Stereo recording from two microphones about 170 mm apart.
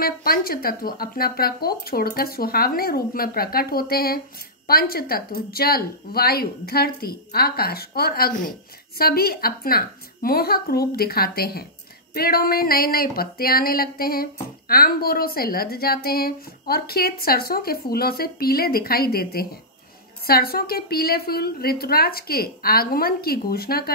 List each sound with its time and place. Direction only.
0.0 s speech: 60° left (ahead or behind)